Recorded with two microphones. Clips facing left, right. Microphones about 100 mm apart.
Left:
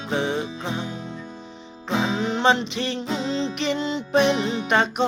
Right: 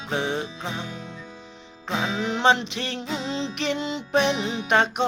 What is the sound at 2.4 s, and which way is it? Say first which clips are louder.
Music: even; centre (ahead or behind).